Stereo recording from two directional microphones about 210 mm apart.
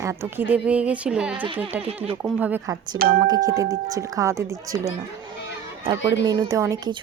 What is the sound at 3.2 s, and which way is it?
A woman's voice, 15° right (ahead or behind).